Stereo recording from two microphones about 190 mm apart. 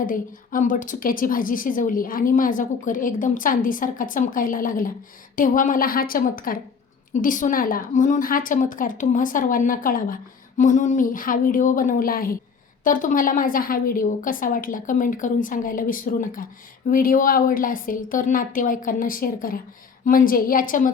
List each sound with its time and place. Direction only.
0.0 s a woman's voice: 45° left (ahead or behind)